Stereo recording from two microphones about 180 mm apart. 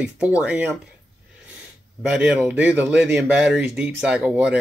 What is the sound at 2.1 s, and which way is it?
Speech, 5° right (ahead or behind).